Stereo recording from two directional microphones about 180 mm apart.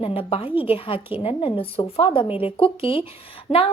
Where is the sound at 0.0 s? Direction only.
30° left (ahead or behind).